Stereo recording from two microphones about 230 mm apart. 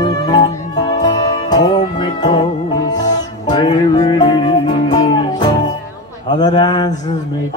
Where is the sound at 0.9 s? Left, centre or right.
Centre.